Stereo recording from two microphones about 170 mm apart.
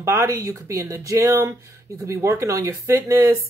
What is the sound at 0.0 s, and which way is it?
Speech, 15° right (ahead or behind).